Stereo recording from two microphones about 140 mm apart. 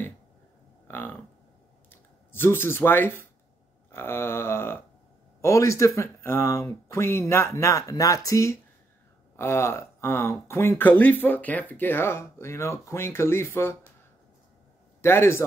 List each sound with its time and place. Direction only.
0.8 s a sound: 15° left (ahead or behind)
1.9 s speech: 15° left (ahead or behind)
15.0 s a man's voice: 15° left (ahead or behind)